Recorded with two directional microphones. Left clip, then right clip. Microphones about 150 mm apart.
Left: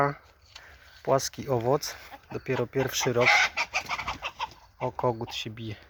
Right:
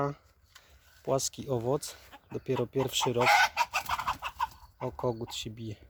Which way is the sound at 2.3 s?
30° right (ahead or behind).